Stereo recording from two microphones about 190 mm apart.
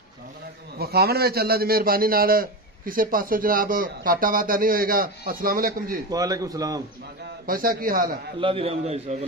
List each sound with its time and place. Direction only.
0.7 s a man's voice: 55° right (ahead or behind)
6.1 s speech: 20° right (ahead or behind)
7.4 s a man's voice: 50° right (ahead or behind)
8.4 s a man's voice: 30° right (ahead or behind)